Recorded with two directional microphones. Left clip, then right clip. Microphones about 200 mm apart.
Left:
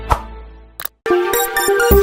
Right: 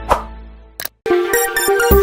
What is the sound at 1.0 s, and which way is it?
Music, centre (ahead or behind).